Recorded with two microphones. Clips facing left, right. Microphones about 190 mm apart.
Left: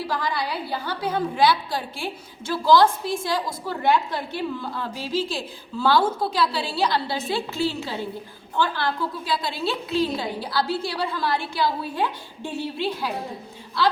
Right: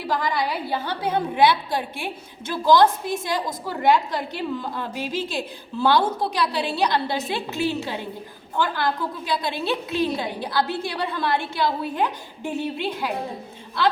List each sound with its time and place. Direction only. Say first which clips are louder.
0.1 s a woman's voice: right 7 dB; 20° right (ahead or behind)
6.4 s a woman's voice: right 1 dB; 20° right (ahead or behind)